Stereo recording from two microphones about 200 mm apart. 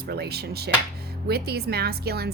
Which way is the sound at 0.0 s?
50° right (ahead or behind).